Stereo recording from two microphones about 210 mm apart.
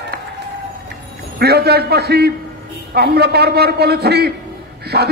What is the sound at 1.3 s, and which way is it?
A man's voice, 50° right (ahead or behind).